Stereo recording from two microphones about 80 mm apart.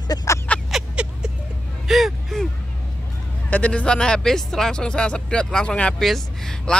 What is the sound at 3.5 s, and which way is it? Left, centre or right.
Speech, centre.